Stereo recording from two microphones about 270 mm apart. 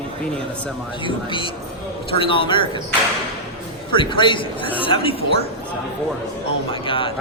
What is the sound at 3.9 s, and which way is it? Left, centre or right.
A man's voice, centre.